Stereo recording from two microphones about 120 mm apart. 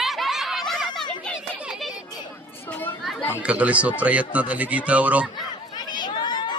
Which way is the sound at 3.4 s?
10° right (ahead or behind).